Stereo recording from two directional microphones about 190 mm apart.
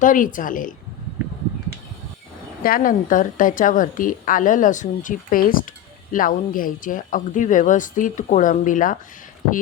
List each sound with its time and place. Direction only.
0.0 s a woman's voice: 45° left (ahead or behind)
2.6 s a woman's voice: 50° left (ahead or behind)